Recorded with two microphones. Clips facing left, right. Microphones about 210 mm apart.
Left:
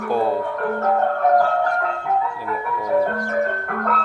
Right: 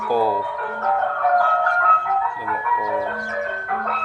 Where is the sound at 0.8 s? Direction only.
40° left (ahead or behind).